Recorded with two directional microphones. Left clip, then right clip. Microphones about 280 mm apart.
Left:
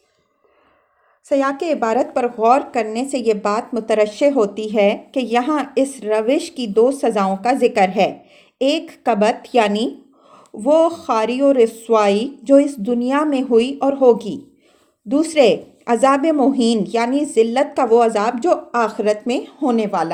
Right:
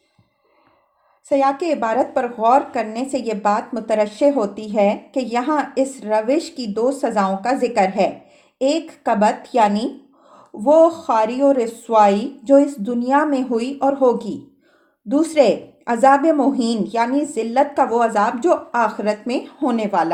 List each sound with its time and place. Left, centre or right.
1.3 s speech: left
15.4 s speech: left